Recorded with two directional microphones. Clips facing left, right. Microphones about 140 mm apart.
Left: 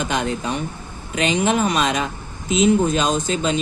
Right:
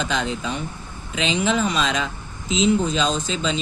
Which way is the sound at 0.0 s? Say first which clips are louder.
Left 2 dB; 55° left (ahead or behind).